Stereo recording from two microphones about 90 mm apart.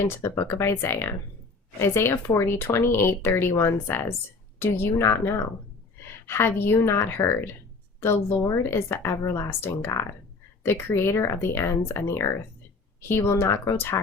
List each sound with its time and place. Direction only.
0.1 s speech: 30° left (ahead or behind)